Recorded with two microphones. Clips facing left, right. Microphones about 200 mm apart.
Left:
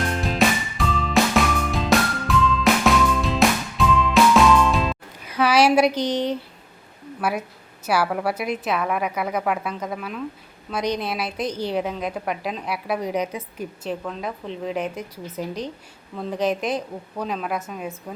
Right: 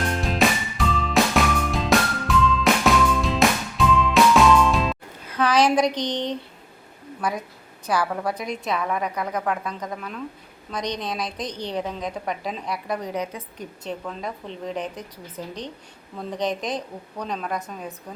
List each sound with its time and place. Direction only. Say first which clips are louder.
0.0 s music: left 1 dB; centre (ahead or behind)
5.2 s a sound: left 2 dB; 10° left (ahead or behind)
7.2 s a woman's voice: left 2 dB; 5° left (ahead or behind)